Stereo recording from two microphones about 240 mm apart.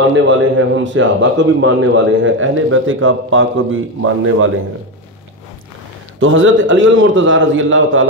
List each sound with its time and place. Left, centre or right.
0.3 s a man's voice: right
6.1 s a man's voice: right